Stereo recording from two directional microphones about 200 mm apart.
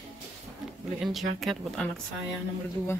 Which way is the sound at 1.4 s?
Centre (ahead or behind).